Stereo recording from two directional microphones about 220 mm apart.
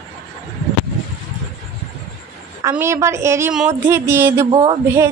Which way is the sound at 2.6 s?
10° right (ahead or behind).